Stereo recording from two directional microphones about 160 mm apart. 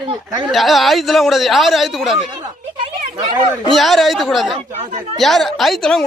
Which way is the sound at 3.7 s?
Centre (ahead or behind).